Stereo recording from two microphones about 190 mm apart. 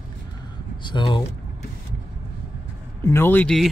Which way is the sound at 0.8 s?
25° left (ahead or behind).